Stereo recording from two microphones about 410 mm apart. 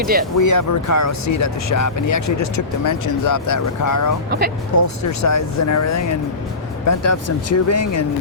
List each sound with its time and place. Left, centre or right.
0.0 s speech: right
0.3 s speech: left
4.3 s speech: right
4.8 s speech: left